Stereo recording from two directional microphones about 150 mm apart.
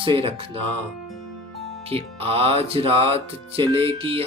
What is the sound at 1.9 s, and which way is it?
Music, 40° right (ahead or behind).